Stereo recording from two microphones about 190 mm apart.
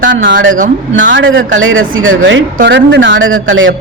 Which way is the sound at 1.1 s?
75° right (ahead or behind).